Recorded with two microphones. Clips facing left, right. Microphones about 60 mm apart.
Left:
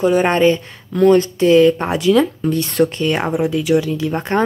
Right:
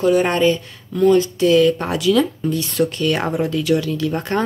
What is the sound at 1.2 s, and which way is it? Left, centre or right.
Speech, left.